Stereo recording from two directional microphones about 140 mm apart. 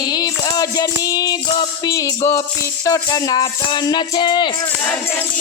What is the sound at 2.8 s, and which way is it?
Speech, 25° left (ahead or behind).